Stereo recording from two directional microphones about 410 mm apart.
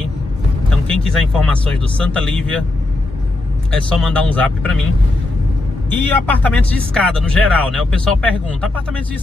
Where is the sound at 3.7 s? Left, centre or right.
Centre.